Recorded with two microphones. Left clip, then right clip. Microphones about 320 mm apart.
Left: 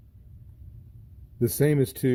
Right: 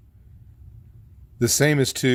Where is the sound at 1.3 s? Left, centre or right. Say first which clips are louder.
Right 4 dB; centre.